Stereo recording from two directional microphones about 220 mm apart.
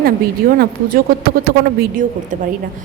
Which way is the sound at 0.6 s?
45° right (ahead or behind).